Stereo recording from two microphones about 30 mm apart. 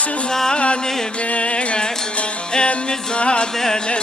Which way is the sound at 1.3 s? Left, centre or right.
Left.